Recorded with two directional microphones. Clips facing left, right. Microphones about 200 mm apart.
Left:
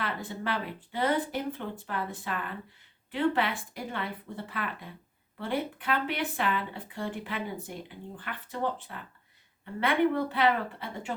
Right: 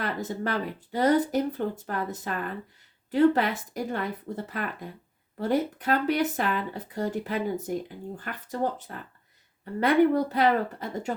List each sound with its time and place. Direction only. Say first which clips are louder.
0.0 s speech: right 4 dB; 45° right (ahead or behind)